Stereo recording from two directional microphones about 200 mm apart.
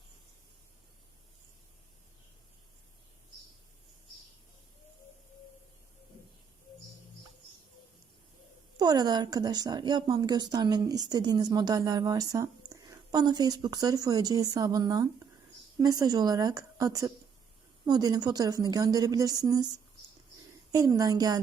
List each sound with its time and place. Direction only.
8.8 s a woman's voice: 20° right (ahead or behind)
20.7 s a woman's voice: 20° right (ahead or behind)